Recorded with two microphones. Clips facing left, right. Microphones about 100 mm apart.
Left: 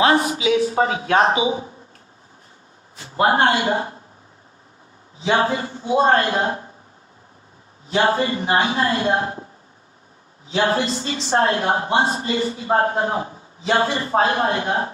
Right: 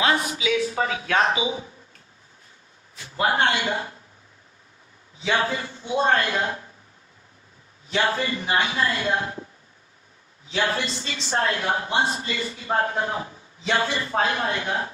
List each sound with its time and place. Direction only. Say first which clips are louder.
0.0 s a woman's voice: left 6 dB; 35° left (ahead or behind)
2.9 s a man's voice: left 5 dB; 35° left (ahead or behind)
5.2 s a woman's voice: left 5 dB; 35° left (ahead or behind)
7.9 s a woman's voice: left 5 dB; 35° left (ahead or behind)
10.5 s a woman's voice: left 6 dB; 35° left (ahead or behind)